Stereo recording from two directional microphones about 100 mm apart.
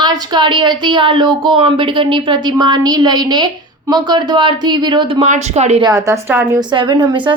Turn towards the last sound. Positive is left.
turn(degrees=-50)  # may be behind; listen again after turning